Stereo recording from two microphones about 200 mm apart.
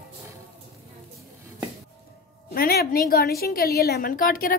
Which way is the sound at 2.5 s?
50° left (ahead or behind).